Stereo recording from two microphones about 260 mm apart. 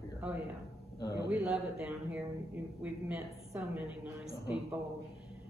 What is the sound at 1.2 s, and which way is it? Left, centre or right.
Speech, centre.